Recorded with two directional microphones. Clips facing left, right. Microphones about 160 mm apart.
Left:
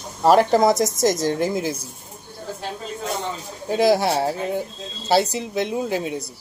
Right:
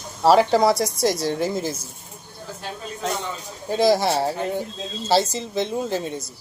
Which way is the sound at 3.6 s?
5° left (ahead or behind).